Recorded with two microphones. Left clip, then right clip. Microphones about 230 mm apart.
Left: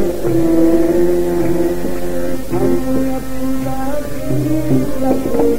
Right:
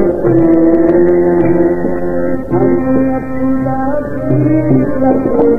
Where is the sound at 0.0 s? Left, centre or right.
Right.